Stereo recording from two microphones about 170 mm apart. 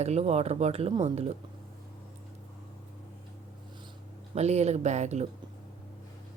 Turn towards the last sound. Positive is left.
turn(degrees=-40)  # may be behind; listen again after turning